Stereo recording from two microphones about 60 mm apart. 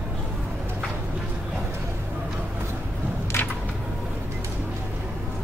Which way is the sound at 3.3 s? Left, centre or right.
Left.